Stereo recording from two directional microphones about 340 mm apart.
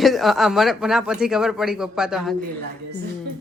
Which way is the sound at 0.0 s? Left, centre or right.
Centre.